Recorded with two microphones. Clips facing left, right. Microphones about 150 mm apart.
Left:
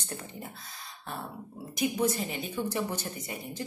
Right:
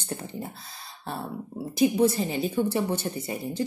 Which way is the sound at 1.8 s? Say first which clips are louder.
Right 7 dB; 30° right (ahead or behind).